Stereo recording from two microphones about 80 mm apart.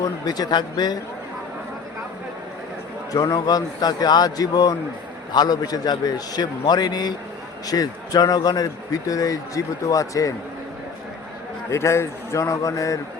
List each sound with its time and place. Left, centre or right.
0.0 s a man's voice: left
3.1 s a man's voice: left
8.9 s speech: left
11.7 s a man's voice: left